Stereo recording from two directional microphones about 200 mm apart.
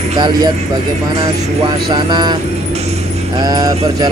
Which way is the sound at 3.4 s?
20° right (ahead or behind).